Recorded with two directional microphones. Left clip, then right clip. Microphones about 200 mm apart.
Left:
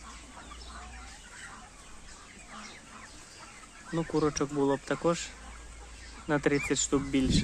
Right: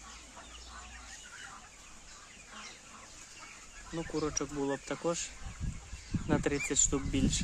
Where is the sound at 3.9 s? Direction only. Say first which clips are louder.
Left 6 dB; 15° left (ahead or behind).